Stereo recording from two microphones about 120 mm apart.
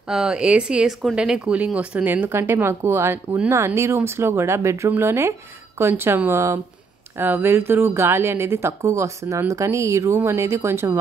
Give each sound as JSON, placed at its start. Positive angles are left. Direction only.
{"t": 0.1, "sound": "speech", "side_deg": -5}